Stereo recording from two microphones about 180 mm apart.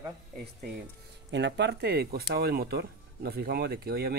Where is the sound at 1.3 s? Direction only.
70° right (ahead or behind).